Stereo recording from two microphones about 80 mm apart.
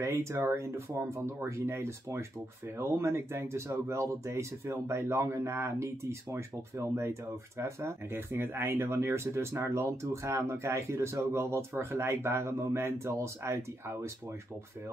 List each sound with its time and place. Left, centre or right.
0.0 s speech: right